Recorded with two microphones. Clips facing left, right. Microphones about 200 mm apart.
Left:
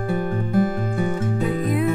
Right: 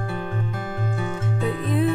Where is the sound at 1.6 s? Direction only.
30° right (ahead or behind).